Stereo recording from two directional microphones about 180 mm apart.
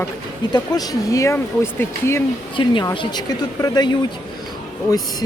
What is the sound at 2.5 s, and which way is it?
Speech, 25° left (ahead or behind).